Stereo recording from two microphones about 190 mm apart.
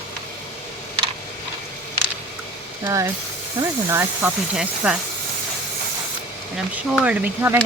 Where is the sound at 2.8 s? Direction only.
15° right (ahead or behind).